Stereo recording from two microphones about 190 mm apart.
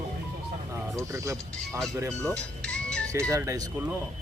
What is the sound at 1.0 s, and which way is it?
Speech, 15° right (ahead or behind).